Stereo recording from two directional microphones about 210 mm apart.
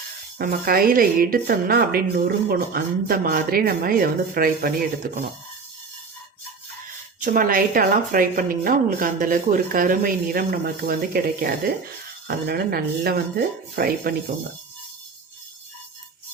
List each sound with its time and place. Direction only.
0.3 s speech: 45° right (ahead or behind)
7.2 s speech: 40° right (ahead or behind)